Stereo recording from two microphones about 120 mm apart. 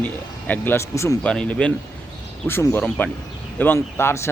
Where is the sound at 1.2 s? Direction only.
10° left (ahead or behind).